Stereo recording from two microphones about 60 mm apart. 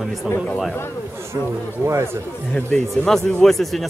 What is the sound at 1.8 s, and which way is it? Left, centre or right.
Speech, right.